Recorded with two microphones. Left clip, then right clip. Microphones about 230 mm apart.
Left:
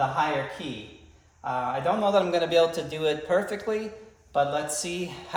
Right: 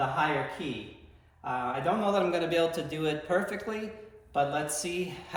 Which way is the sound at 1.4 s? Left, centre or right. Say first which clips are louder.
Left 4 dB; centre.